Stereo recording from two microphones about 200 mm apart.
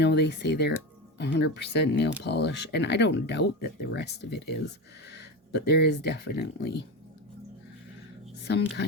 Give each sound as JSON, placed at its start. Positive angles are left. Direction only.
{"t": 0.0, "sound": "speech", "side_deg": 60}
{"t": 8.4, "sound": "speech", "side_deg": 60}